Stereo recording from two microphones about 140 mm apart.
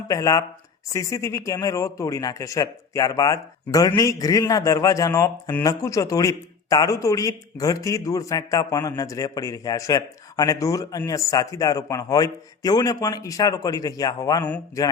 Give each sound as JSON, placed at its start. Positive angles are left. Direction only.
{"t": 0.1, "sound": "speech", "side_deg": 25}